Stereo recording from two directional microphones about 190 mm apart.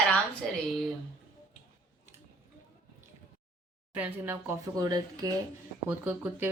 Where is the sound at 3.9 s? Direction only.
10° right (ahead or behind).